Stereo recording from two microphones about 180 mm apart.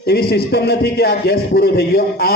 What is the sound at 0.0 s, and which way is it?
A man's voice, 60° left (ahead or behind).